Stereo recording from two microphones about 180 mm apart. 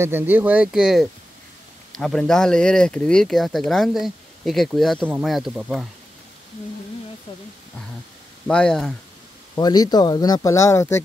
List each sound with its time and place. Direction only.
0.0 s speech: 10° right (ahead or behind)
8.5 s speech: 5° left (ahead or behind)
9.6 s speech: 20° left (ahead or behind)